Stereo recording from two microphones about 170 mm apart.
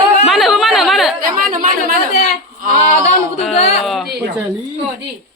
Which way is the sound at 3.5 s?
40° left (ahead or behind).